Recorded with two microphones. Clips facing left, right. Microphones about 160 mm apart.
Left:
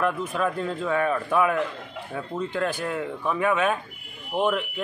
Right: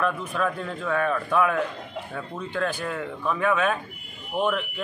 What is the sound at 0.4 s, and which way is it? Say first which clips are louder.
A man's voice: left 1 dB; 10° left (ahead or behind).